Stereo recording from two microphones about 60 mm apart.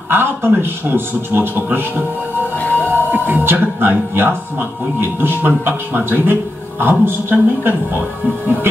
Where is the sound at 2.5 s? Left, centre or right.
Left.